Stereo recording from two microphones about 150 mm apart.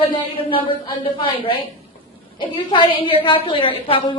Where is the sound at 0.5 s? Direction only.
35° left (ahead or behind).